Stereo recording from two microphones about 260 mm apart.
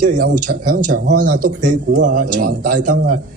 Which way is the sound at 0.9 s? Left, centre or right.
Right.